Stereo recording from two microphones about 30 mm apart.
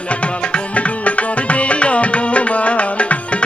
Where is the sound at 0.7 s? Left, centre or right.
Left.